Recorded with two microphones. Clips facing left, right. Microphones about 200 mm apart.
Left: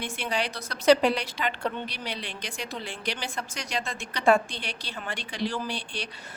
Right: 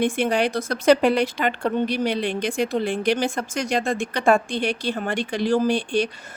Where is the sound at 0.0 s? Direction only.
50° right (ahead or behind).